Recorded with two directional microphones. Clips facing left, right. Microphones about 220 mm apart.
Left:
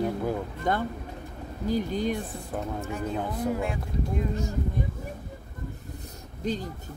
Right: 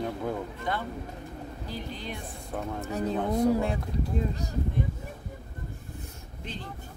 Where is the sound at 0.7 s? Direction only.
45° left (ahead or behind).